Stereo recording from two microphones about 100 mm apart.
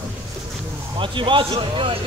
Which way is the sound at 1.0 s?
55° right (ahead or behind).